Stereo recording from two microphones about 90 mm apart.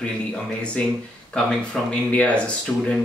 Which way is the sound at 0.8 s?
15° left (ahead or behind).